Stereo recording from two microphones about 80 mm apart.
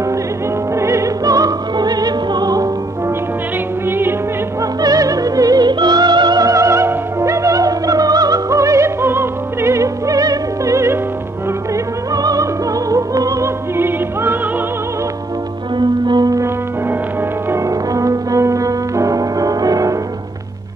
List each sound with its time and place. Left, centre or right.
0.7 s opera: right
4.6 s music: right
6.4 s opera: right
11.7 s opera: right
12.9 s music: right
13.7 s music: right
15.8 s music: right
17.6 s music: right